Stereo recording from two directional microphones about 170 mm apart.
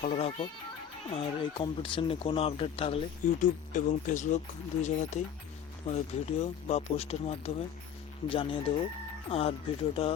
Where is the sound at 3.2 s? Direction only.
50° left (ahead or behind).